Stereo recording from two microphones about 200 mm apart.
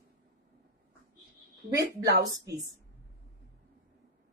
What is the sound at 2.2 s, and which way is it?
Speech, 45° right (ahead or behind).